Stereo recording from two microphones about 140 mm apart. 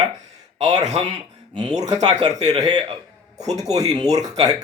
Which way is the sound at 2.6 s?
30° right (ahead or behind).